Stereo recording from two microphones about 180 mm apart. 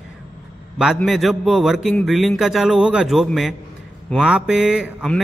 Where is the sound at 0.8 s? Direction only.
Centre (ahead or behind).